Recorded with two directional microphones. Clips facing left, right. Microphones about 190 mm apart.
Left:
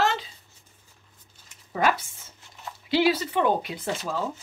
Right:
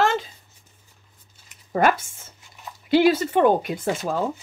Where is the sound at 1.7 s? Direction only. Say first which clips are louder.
Right 4 dB; 50° right (ahead or behind).